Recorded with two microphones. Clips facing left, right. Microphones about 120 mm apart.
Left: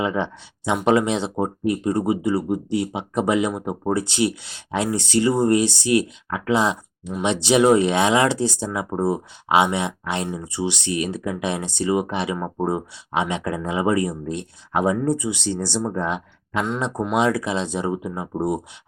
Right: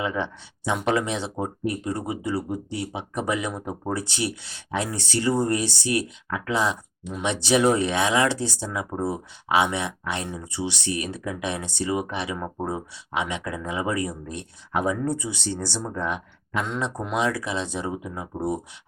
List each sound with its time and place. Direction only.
0.0 s speech: 25° left (ahead or behind)
13.1 s speech: 30° left (ahead or behind)